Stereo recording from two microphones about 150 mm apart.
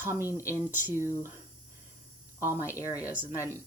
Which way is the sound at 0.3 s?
20° left (ahead or behind).